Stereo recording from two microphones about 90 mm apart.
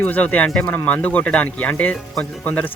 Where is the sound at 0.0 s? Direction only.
20° left (ahead or behind).